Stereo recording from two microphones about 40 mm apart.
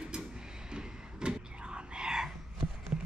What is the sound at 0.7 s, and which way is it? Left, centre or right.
Whispering, right.